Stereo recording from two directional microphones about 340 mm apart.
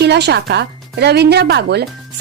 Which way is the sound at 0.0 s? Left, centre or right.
Right.